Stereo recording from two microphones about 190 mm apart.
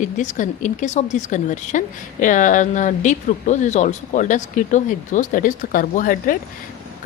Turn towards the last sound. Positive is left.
turn(degrees=45)  # may be behind; listen again after turning